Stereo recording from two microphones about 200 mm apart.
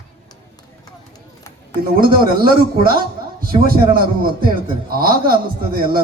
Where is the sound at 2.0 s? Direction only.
45° right (ahead or behind).